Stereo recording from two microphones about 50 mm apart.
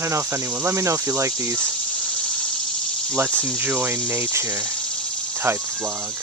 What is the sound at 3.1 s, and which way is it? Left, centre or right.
Speech, right.